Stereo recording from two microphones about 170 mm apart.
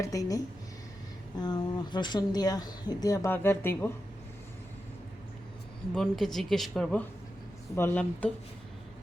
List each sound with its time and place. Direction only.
0.0 s speech: 20° left (ahead or behind)
5.9 s speech: centre (ahead or behind)